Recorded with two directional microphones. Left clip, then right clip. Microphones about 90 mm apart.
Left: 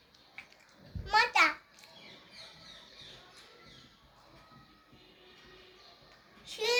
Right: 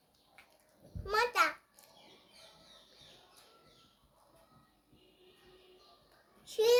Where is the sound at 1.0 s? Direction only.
40° right (ahead or behind).